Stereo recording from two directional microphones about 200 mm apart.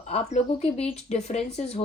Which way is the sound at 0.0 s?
35° left (ahead or behind).